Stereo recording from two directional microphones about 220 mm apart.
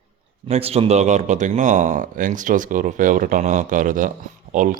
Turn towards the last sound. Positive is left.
turn(degrees=-35)  # may be behind; listen again after turning